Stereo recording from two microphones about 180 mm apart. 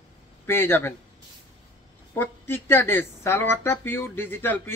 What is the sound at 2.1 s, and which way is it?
Speech, 15° left (ahead or behind).